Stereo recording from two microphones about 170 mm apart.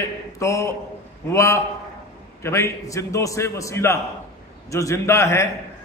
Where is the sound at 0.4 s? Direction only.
15° left (ahead or behind).